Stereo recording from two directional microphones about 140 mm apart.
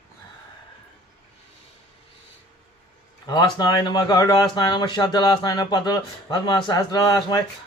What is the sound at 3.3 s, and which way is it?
Speech, 30° left (ahead or behind).